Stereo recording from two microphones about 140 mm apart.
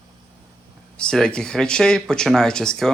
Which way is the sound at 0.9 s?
5° left (ahead or behind).